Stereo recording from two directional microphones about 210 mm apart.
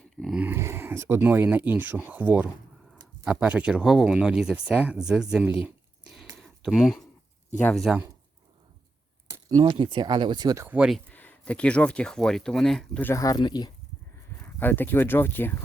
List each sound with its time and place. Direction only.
0.2 s speech: 5° right (ahead or behind)
5.6 s a sound: centre (ahead or behind)
7.6 s speech: 5° left (ahead or behind)
9.3 s speech: 15° right (ahead or behind)
11.1 s speech: 5° left (ahead or behind)
14.4 s speech: 10° left (ahead or behind)